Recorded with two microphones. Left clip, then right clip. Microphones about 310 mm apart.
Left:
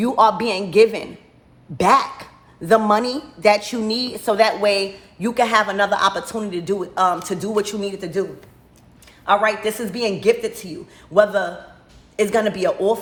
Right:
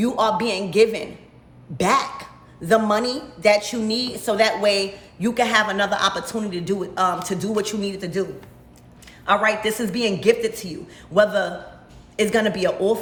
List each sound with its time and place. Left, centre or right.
0.0 s a woman's voice: centre